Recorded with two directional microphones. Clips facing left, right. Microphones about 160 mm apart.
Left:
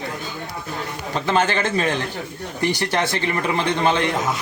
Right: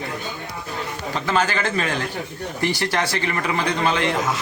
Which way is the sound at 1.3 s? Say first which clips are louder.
Left 2 dB; 25° left (ahead or behind).